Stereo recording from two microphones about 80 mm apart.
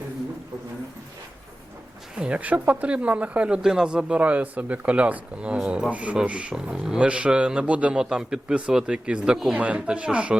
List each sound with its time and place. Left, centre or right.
2.1 s speech: centre
5.9 s speech: centre